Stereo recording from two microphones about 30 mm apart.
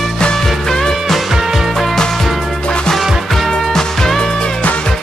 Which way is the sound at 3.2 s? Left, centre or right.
Centre.